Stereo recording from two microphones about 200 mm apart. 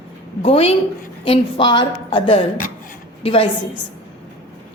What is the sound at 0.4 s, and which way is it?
A woman's voice, 30° left (ahead or behind).